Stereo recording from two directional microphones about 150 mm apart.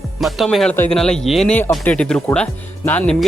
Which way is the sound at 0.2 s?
Centre (ahead or behind).